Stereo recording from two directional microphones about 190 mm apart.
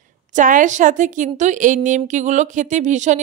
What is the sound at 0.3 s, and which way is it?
A woman's voice, 45° right (ahead or behind).